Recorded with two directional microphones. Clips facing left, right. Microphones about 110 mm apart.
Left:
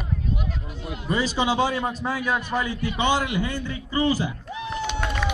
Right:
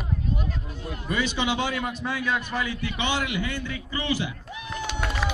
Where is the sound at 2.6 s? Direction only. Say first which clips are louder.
Left 5 dB; 35° left (ahead or behind).